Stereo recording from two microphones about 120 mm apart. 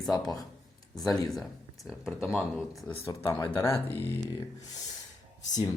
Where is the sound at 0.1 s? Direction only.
30° left (ahead or behind).